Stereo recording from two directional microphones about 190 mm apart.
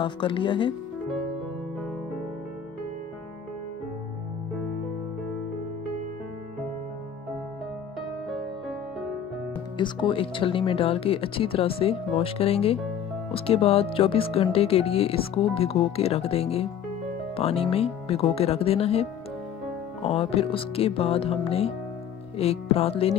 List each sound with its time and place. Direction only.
0.0 s speech: 25° left (ahead or behind)
9.8 s speech: 25° left (ahead or behind)